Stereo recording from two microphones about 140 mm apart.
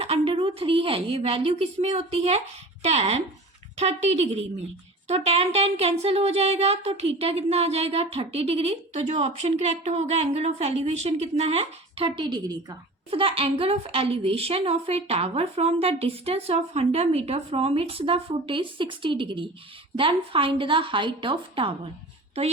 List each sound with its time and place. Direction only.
0.0 s a woman's voice: 40° right (ahead or behind)
13.1 s a woman's voice: 40° right (ahead or behind)